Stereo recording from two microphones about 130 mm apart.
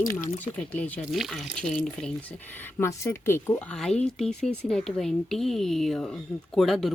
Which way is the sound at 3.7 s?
5° left (ahead or behind).